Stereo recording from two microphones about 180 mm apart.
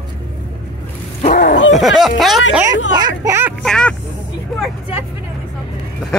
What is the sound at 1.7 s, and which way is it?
Speech, centre (ahead or behind).